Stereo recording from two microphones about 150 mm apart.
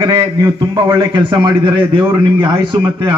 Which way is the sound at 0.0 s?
30° right (ahead or behind).